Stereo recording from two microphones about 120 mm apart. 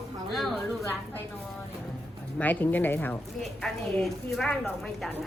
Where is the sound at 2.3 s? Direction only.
15° left (ahead or behind).